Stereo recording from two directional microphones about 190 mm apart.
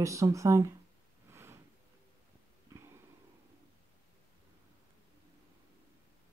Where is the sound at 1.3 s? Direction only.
15° right (ahead or behind).